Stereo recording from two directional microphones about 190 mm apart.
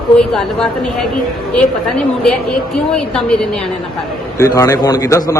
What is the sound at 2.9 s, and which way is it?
Speech, 5° left (ahead or behind).